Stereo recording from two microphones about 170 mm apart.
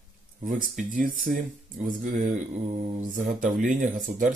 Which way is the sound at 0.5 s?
50° right (ahead or behind).